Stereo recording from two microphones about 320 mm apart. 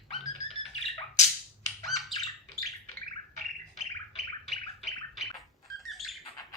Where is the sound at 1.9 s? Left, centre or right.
Centre.